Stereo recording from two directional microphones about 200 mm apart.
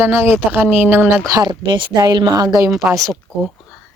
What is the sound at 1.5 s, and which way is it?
Speech, 25° right (ahead or behind).